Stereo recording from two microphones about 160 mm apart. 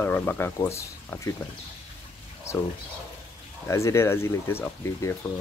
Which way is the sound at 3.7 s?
20° left (ahead or behind).